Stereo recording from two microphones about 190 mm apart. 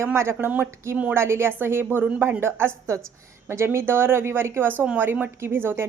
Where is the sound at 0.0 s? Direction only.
15° right (ahead or behind).